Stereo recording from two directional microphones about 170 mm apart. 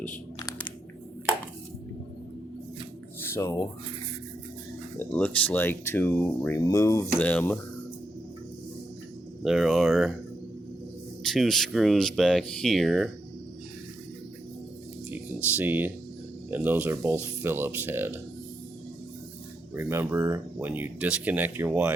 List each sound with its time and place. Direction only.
3.3 s speech: 20° left (ahead or behind)
4.9 s speech: 10° left (ahead or behind)
9.4 s speech: centre (ahead or behind)
11.3 s speech: centre (ahead or behind)
15.1 s a sound: 10° right (ahead or behind)
16.5 s speech: 10° right (ahead or behind)
19.7 s speech: 15° right (ahead or behind)